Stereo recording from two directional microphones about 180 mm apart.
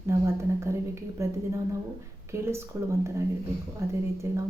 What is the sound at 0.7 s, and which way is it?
Speech, 15° right (ahead or behind).